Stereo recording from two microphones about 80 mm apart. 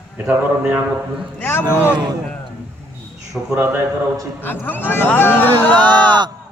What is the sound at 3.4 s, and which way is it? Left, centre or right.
Speech, centre.